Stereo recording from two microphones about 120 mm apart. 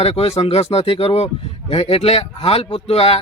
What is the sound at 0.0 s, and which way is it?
Speech, 55° left (ahead or behind).